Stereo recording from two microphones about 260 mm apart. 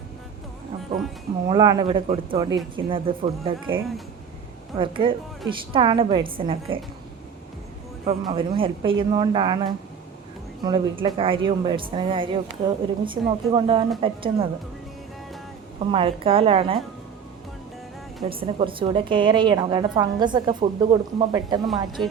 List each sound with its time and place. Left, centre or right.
1.5 s a woman's voice: centre
4.8 s a woman's voice: centre
8.0 s a woman's voice: right
15.9 s a woman's voice: centre
18.3 s a woman's voice: centre